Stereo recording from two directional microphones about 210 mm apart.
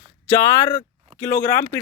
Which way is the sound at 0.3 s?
10° left (ahead or behind).